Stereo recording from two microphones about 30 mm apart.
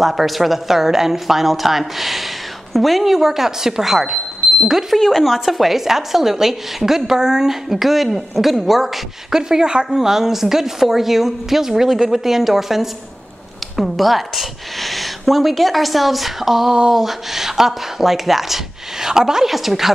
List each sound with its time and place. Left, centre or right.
0.0 s a woman's voice: centre
4.9 s speech: centre
5.2 s a woman's voice: centre
9.3 s speech: right
9.9 s a woman's voice: centre
19.4 s a woman's voice: centre